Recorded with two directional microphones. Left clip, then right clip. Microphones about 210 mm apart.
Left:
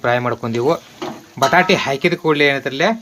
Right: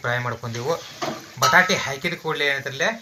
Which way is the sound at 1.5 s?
50° left (ahead or behind).